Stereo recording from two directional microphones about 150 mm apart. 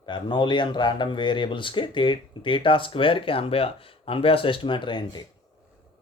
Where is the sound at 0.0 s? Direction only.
30° left (ahead or behind).